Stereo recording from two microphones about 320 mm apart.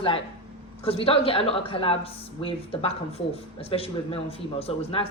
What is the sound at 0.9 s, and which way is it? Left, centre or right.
A woman's voice, centre.